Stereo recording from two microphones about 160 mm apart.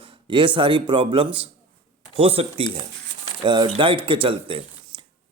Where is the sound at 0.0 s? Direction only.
35° right (ahead or behind).